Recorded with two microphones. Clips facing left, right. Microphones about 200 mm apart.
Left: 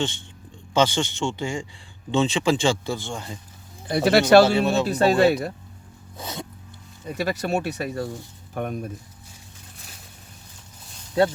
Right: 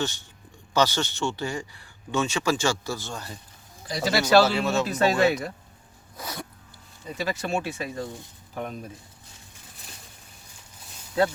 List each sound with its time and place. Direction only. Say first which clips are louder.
0.7 s speech: left 3 dB; 25° left (ahead or behind)
3.8 s speech: left 7 dB; 60° left (ahead or behind)
4.4 s speech: left 4 dB; 30° left (ahead or behind)
6.1 s music: left 2 dB; 25° left (ahead or behind)
7.1 s speech: left 3 dB; 40° left (ahead or behind)
8.5 s speech: left 5 dB; 55° left (ahead or behind)